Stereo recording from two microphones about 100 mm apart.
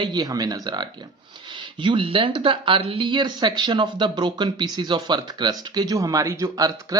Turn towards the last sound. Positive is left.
turn(degrees=-35)  # may be behind; listen again after turning